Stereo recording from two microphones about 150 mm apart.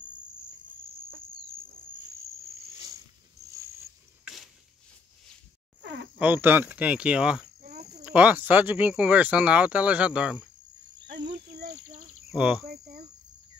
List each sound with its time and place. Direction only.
4.2 s a sound: centre (ahead or behind)
6.1 s speech: 15° right (ahead or behind)
11.6 s insect: 50° right (ahead or behind)
12.3 s speech: 10° right (ahead or behind)
12.6 s cricket: 90° right